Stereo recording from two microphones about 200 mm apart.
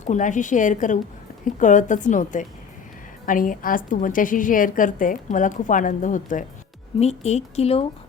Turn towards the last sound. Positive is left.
turn(degrees=30)  # may be behind; listen again after turning